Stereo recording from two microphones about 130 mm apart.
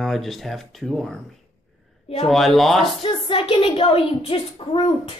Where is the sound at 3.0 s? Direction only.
45° left (ahead or behind).